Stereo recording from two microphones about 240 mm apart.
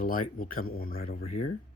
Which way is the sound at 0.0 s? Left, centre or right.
Left.